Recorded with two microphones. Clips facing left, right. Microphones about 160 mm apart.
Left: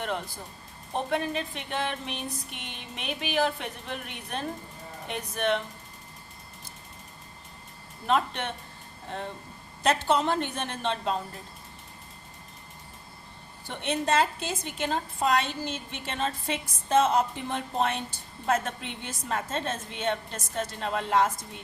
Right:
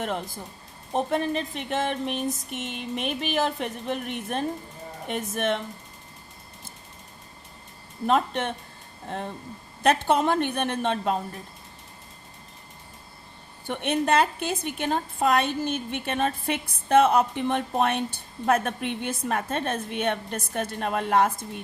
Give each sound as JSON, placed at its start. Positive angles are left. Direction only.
{"t": 0.9, "sound": "speech", "side_deg": -40}
{"t": 8.0, "sound": "speech", "side_deg": -45}
{"t": 9.8, "sound": "a woman's voice", "side_deg": -55}
{"t": 13.7, "sound": "a woman's voice", "side_deg": -60}